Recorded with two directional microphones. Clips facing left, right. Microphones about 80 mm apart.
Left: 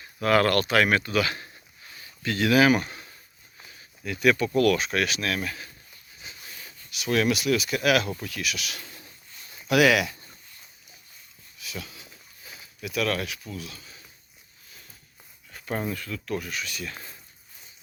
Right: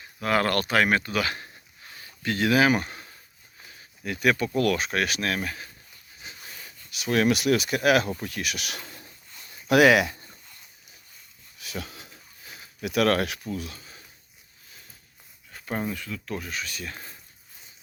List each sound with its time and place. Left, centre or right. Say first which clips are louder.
0.0 s speech: left 3 dB; centre; by 1.5 s right
1.9 s a sound: right 1 dB; right
4.0 s speech: left 1 dB; right
6.9 s speech: right 1 dB; right
7.3 s speech: right 2 dB; right
11.6 s dog: right 2 dB; right
12.8 s speech: right 5 dB; right
13.4 s speech: right 5 dB; right
15.6 s speech: even; centre; by 17.2 s right